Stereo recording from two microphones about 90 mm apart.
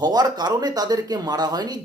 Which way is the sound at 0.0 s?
50° right (ahead or behind).